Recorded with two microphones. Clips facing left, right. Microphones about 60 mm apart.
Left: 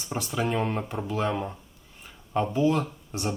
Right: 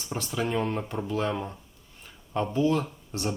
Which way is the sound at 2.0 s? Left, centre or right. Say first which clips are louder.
Left 2 dB; centre.